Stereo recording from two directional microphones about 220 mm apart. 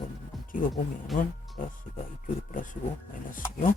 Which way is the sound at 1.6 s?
40° left (ahead or behind).